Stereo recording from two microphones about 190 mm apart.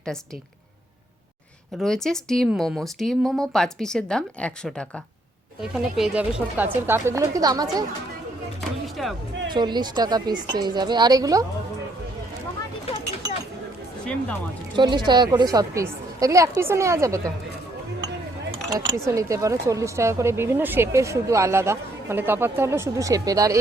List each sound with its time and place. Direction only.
1.8 s speech: centre (ahead or behind); by 7.9 s 20° right (ahead or behind)
9.0 s speech: centre (ahead or behind)
9.5 s a woman's voice: 25° right (ahead or behind)
14.0 s speech: 5° left (ahead or behind)
14.8 s speech: 25° right (ahead or behind)
18.7 s speech: 20° right (ahead or behind)